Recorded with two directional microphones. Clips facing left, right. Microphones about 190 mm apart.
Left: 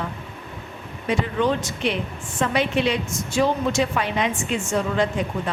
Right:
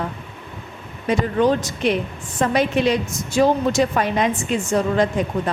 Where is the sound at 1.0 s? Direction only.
40° right (ahead or behind).